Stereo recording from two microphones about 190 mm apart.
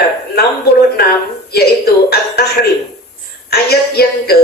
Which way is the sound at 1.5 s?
55° left (ahead or behind).